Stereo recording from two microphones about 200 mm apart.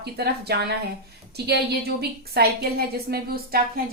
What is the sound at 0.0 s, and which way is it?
A woman's voice, 55° right (ahead or behind).